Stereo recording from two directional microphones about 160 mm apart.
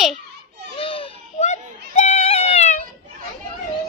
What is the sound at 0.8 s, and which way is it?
Baby cry, 35° left (ahead or behind).